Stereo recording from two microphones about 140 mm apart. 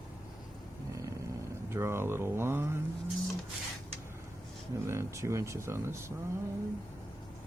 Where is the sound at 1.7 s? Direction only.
20° right (ahead or behind).